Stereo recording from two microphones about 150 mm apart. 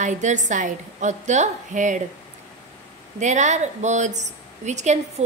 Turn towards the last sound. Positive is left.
turn(degrees=-50)  # may be behind; listen again after turning